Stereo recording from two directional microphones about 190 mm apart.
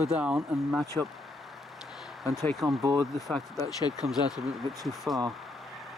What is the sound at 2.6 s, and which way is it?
Speech, 15° right (ahead or behind).